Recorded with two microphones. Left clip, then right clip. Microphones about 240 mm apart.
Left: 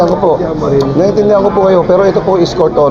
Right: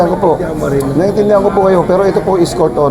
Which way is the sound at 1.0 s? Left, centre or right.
Right.